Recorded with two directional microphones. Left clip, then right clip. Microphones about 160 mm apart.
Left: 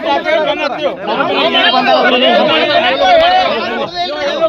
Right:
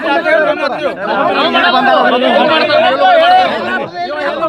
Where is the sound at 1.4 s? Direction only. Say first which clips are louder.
Left 1 dB; 30° right (ahead or behind).